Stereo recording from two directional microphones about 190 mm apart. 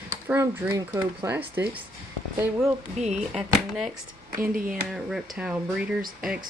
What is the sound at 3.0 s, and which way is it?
Speech, 35° right (ahead or behind).